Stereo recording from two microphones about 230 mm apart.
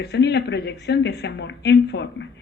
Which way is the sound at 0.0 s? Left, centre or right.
Left.